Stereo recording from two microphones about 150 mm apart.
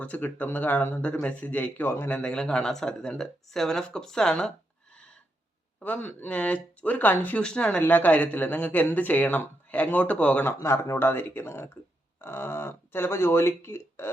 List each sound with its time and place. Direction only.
0.0 s speech: 10° left (ahead or behind)
5.8 s speech: 10° left (ahead or behind)